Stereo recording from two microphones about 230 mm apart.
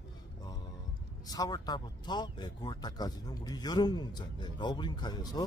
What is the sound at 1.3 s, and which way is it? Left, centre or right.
Speech, centre.